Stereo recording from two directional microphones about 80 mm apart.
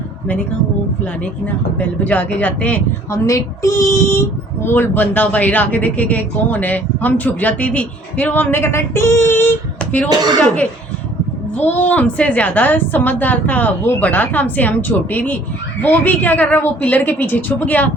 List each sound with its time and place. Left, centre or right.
2.0 s speech: centre
3.1 s speech: left
11.5 s speech: left